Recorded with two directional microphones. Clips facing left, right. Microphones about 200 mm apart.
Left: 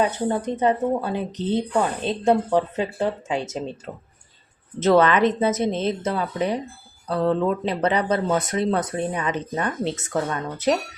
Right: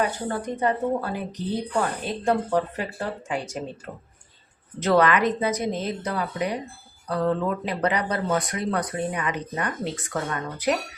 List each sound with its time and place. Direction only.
0.0 s a woman's voice: 20° left (ahead or behind)
4.8 s a woman's voice: 25° left (ahead or behind)